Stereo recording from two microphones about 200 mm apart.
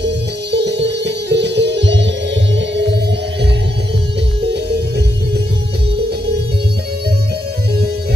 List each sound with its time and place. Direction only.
0.0 s music: 60° right (ahead or behind)
4.6 s music: 55° right (ahead or behind)